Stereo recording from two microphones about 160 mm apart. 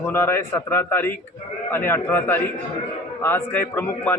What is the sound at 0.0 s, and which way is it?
A man's voice, 15° left (ahead or behind).